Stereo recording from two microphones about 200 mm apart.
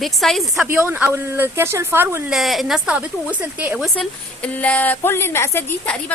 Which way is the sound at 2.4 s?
Centre (ahead or behind).